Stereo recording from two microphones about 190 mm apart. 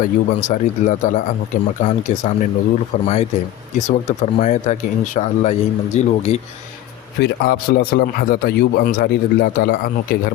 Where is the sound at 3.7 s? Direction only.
40° left (ahead or behind).